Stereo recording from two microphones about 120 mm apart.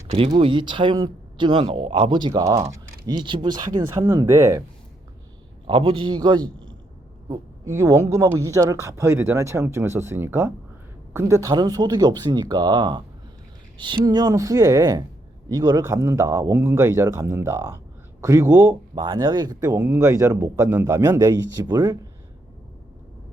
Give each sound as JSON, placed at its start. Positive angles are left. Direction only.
{"t": 0.3, "sound": "speech", "side_deg": -45}
{"t": 2.4, "sound": "speech", "side_deg": -25}
{"t": 3.2, "sound": "speech", "side_deg": -40}
{"t": 4.2, "sound": "speech", "side_deg": -25}
{"t": 5.6, "sound": "speech", "side_deg": -45}
{"t": 7.3, "sound": "speech", "side_deg": -25}